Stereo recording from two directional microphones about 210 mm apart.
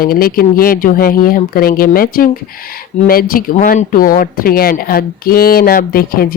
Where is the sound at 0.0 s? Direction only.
45° left (ahead or behind).